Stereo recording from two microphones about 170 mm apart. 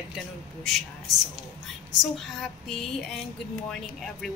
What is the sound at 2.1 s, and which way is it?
A woman's voice, 5° left (ahead or behind).